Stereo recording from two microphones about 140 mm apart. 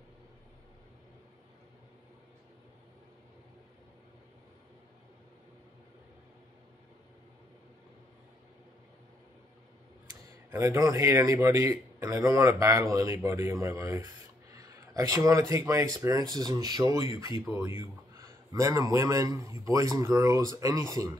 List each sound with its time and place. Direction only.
10.0 s a man's voice: 20° right (ahead or behind)